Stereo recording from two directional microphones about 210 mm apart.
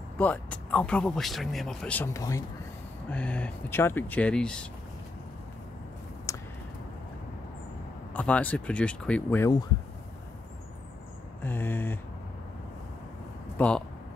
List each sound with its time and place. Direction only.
0.2 s speech: 5° left (ahead or behind)
6.3 s a sound: 15° left (ahead or behind)
8.1 s speech: 5° left (ahead or behind)
11.4 s speech: 10° left (ahead or behind)
13.6 s speech: 5° left (ahead or behind)